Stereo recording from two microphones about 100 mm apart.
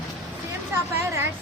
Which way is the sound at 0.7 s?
25° right (ahead or behind).